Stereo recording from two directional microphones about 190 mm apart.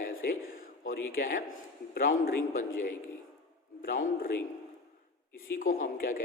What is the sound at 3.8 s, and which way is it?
Speech, 50° left (ahead or behind).